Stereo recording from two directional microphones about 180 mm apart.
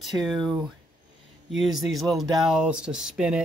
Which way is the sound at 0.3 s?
Centre (ahead or behind).